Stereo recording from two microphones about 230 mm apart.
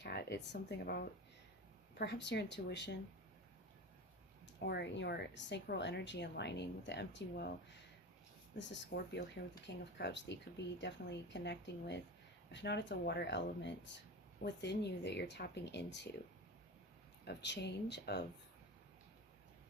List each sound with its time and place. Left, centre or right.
0.0 s a woman's voice: left
4.6 s a woman's voice: left
8.5 s a woman's voice: left
17.2 s a woman's voice: left